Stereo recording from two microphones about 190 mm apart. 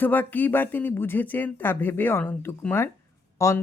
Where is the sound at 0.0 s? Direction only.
10° left (ahead or behind).